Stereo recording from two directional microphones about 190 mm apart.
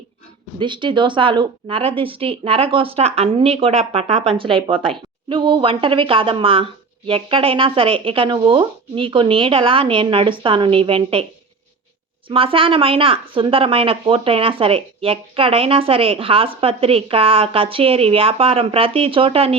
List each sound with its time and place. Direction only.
0.6 s a woman's voice: 25° right (ahead or behind)
12.3 s a woman's voice: 30° right (ahead or behind)